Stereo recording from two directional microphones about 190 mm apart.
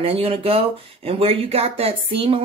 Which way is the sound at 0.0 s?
30° right (ahead or behind).